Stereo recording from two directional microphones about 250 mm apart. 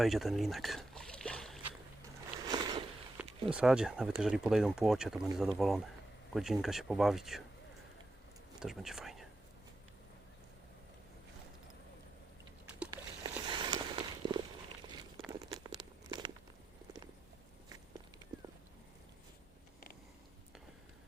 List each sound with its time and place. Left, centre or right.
0.0 s boat: centre
2.5 s a sound: centre
3.2 s speech: centre
8.5 s speech: centre
12.9 s walk: centre
15.3 s a sound: centre